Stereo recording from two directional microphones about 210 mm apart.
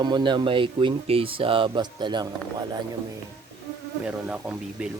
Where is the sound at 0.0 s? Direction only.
20° right (ahead or behind).